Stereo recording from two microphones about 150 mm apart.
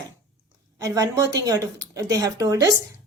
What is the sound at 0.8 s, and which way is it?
A woman's voice, 25° right (ahead or behind).